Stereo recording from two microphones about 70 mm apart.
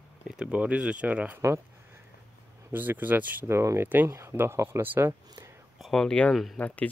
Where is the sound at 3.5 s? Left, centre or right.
Right.